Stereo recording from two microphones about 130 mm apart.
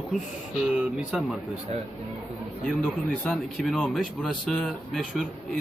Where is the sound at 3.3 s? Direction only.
Centre (ahead or behind).